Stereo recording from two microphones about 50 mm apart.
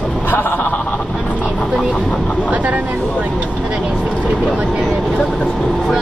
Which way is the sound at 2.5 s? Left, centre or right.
Right.